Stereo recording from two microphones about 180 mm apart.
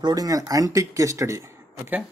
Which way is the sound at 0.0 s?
20° right (ahead or behind).